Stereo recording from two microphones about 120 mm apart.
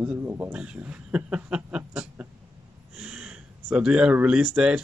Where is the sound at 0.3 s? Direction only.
20° right (ahead or behind).